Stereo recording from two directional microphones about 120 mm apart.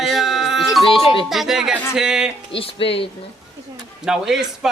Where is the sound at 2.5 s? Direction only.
50° left (ahead or behind).